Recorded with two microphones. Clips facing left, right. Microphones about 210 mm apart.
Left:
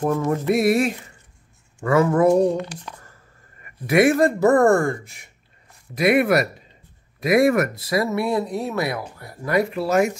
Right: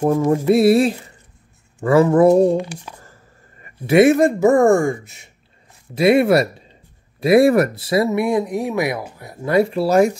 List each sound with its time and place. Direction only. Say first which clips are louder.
0.5 s speech: right 5 dB; 30° right (ahead or behind)
2.5 s speech: right 5 dB; 10° right (ahead or behind)
3.6 s speech: right 5 dB; 25° right (ahead or behind)